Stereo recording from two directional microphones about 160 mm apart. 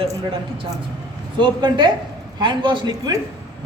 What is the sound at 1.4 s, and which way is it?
Speech, 30° right (ahead or behind).